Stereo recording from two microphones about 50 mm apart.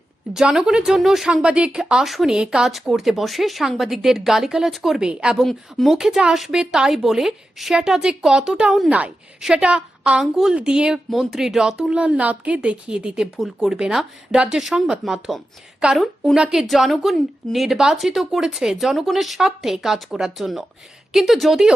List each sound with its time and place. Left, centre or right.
0.4 s speech: centre
1.3 s speech: centre
2.0 s a woman's voice: centre
2.3 s speech: centre
5.5 s speech: centre
5.9 s speech: centre
8.9 s a woman's voice: right
9.4 s speech: centre
11.1 s speech: centre; by 12.5 s right
12.6 s a woman's voice: centre
15.8 s a woman's voice: centre